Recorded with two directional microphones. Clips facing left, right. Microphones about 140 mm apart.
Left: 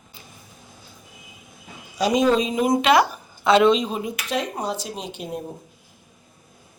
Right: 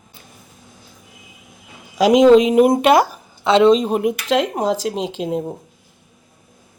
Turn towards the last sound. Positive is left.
turn(degrees=-90)